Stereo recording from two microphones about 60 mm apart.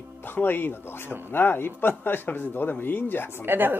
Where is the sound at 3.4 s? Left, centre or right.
Right.